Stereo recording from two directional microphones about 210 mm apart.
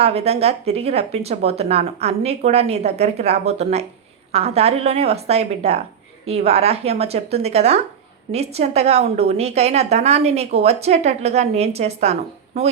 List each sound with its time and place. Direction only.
0.0 s a woman's voice: 30° right (ahead or behind)